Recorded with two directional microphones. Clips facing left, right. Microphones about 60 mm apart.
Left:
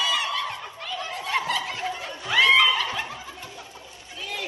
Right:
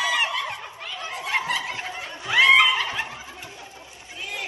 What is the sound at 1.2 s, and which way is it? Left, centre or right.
Snicker, right.